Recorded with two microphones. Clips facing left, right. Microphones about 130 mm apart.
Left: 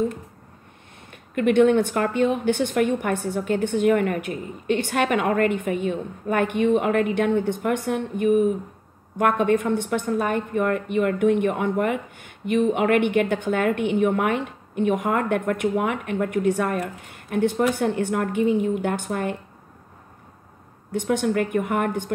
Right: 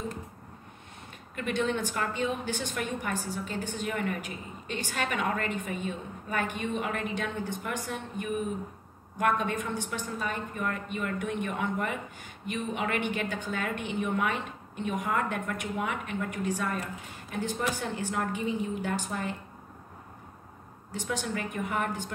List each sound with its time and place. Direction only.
1.3 s a woman's voice: 60° left (ahead or behind)
20.9 s a woman's voice: 55° left (ahead or behind)